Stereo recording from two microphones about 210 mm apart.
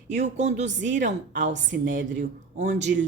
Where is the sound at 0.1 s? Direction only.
35° right (ahead or behind).